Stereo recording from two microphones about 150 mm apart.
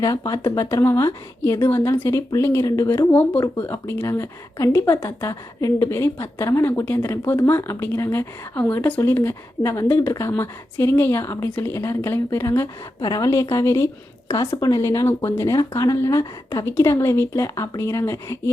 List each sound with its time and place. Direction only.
0.0 s speech: 25° left (ahead or behind)
3.1 s a woman's voice: 10° left (ahead or behind)